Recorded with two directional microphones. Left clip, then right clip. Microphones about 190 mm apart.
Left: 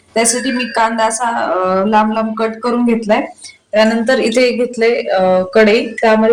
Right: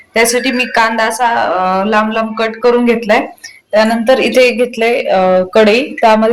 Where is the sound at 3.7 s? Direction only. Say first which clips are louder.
Right 2 dB; 20° right (ahead or behind).